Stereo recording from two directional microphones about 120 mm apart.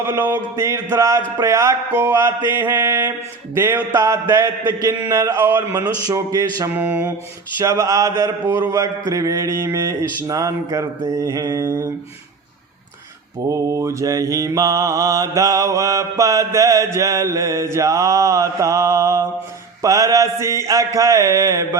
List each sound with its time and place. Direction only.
0.0 s mantra: 20° right (ahead or behind)
2.5 s a sound: 15° right (ahead or behind)
3.9 s mantra: 30° right (ahead or behind)
5.8 s speech: 30° right (ahead or behind)
6.7 s a sound: 15° right (ahead or behind)
7.6 s mantra: 25° right (ahead or behind)
8.4 s a sound: 15° right (ahead or behind)
8.8 s mantra: 25° right (ahead or behind)
13.5 s mantra: 25° right (ahead or behind)